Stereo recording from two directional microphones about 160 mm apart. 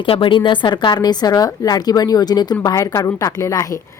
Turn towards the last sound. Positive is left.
turn(degrees=20)  # may be behind; listen again after turning